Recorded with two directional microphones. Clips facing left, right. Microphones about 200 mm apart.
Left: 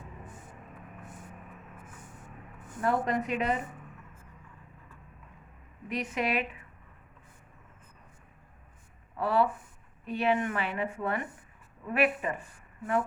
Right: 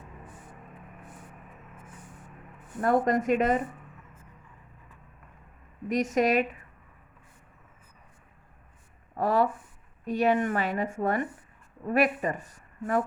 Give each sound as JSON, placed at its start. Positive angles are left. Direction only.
{"t": 2.8, "sound": "a woman's voice", "side_deg": -45}
{"t": 5.9, "sound": "a woman's voice", "side_deg": -45}
{"t": 9.1, "sound": "a woman's voice", "side_deg": -45}